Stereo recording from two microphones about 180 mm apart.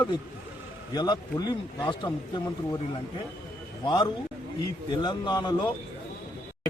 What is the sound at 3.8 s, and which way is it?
Speech, 25° left (ahead or behind).